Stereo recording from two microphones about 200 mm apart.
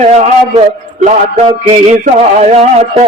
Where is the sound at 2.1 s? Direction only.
35° right (ahead or behind).